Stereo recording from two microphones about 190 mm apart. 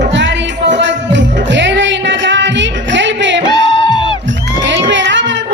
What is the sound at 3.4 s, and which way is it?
Music, 25° left (ahead or behind).